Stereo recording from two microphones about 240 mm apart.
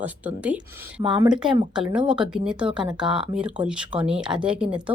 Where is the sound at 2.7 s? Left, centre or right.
Centre.